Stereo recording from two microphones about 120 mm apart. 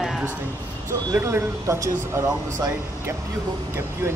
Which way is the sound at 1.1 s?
20° right (ahead or behind).